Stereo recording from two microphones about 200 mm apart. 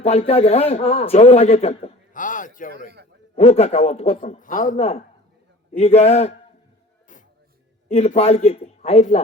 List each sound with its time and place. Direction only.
0.0 s a man's voice: 30° left (ahead or behind)
3.3 s a man's voice: 30° left (ahead or behind)
7.9 s a man's voice: 30° left (ahead or behind)